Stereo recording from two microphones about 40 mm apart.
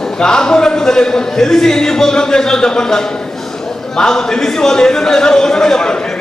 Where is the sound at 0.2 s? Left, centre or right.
Centre.